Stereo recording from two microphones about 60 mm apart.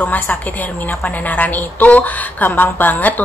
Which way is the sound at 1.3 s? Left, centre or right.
Left.